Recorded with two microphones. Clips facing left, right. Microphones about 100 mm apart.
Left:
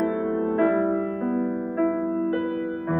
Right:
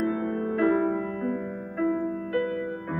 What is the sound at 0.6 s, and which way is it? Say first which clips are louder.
Music: left 1 dB; 30° left (ahead or behind).